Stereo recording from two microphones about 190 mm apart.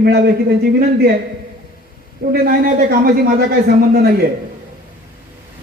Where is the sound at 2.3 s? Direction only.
50° right (ahead or behind).